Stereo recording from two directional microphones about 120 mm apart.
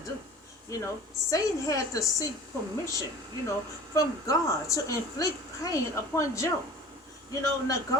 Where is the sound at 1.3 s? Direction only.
30° left (ahead or behind).